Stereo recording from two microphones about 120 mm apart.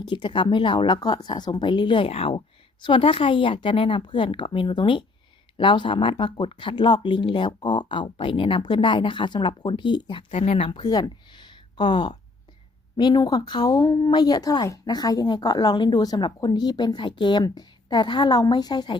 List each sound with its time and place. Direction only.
0.0 s speech: 40° left (ahead or behind)
2.0 s speech: 55° left (ahead or behind)
10.3 s speech: 60° left (ahead or behind)
10.7 s speech: 35° left (ahead or behind)